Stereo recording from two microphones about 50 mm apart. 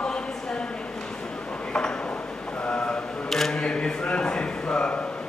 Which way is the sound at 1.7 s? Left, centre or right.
Centre.